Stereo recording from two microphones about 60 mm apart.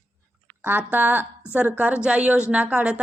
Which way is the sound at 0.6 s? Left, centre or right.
Right.